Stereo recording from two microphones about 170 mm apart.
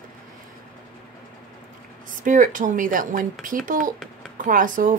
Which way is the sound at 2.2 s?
50° right (ahead or behind).